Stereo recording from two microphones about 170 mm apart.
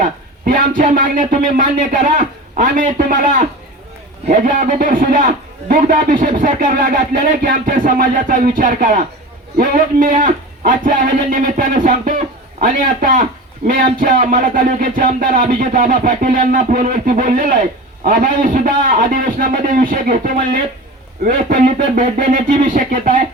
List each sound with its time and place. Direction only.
0.0 s a man's voice: 55° right (ahead or behind)